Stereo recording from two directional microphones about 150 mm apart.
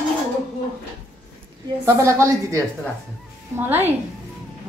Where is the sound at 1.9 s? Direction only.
20° right (ahead or behind).